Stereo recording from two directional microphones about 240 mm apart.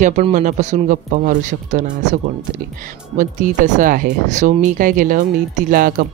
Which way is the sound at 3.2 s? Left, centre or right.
Right.